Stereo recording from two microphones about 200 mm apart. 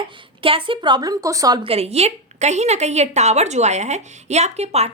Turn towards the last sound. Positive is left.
turn(degrees=-30)  # may be behind; listen again after turning